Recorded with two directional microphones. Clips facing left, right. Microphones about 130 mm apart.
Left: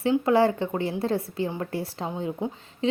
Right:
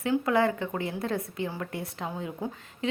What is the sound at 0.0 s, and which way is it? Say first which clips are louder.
A woman's voice: left 4 dB; 30° left (ahead or behind).